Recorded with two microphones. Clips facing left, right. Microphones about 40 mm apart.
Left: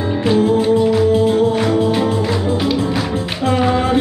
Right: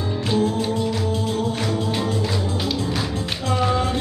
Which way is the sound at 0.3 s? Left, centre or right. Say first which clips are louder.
Left 8 dB; left.